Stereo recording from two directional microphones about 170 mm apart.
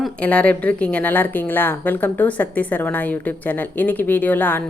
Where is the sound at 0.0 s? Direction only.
10° left (ahead or behind).